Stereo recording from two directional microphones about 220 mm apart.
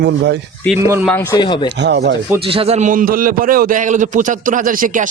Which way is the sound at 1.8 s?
50° right (ahead or behind).